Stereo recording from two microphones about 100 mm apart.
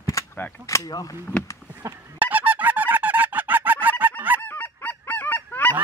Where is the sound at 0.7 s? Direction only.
35° left (ahead or behind).